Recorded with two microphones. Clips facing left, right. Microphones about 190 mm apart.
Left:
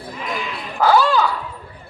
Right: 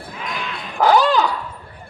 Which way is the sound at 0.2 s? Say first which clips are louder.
Left 2 dB; centre (ahead or behind).